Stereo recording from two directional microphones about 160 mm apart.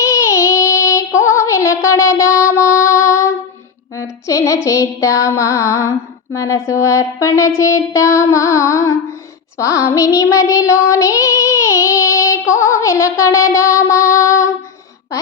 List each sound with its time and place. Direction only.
0.1 s music: 20° left (ahead or behind)
3.9 s child singing: 20° left (ahead or behind)